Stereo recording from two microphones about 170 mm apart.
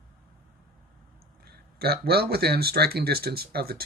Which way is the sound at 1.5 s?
65° right (ahead or behind).